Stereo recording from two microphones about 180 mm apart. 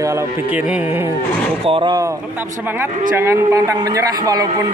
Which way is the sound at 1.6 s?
25° right (ahead or behind).